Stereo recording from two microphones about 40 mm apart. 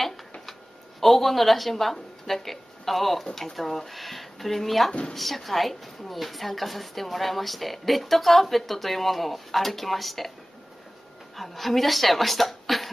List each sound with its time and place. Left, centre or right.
1.0 s a woman's voice: centre
11.3 s a woman's voice: centre